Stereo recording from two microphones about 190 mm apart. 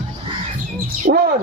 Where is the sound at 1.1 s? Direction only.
55° right (ahead or behind).